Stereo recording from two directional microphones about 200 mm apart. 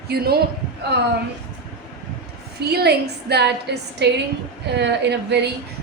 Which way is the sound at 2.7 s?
55° right (ahead or behind).